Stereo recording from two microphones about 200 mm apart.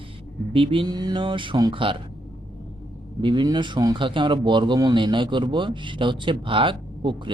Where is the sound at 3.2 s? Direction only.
25° right (ahead or behind).